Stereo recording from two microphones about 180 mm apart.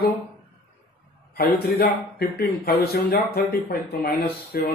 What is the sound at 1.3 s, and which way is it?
Speech, 60° left (ahead or behind).